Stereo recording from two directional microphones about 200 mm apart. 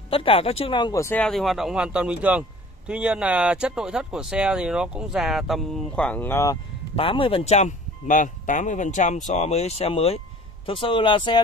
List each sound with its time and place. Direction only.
0.1 s speech: 30° left (ahead or behind)
7.0 s speech: 25° left (ahead or behind)